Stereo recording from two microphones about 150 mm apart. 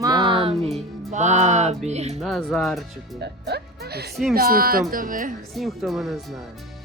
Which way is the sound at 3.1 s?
90° right.